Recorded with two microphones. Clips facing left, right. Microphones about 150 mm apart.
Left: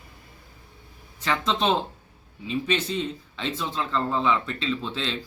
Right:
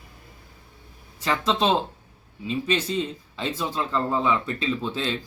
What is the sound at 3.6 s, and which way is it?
Speech, 10° right (ahead or behind).